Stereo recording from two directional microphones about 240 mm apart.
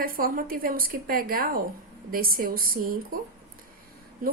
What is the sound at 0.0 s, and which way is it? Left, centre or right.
A woman's voice, right.